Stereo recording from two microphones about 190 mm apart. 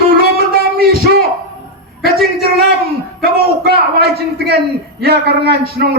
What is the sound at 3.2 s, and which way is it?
A man's voice, 55° right (ahead or behind).